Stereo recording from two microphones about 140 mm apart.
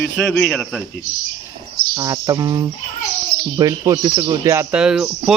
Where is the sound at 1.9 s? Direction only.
25° right (ahead or behind).